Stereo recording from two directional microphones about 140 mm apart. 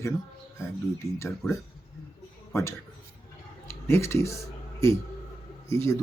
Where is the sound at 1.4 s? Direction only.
20° left (ahead or behind).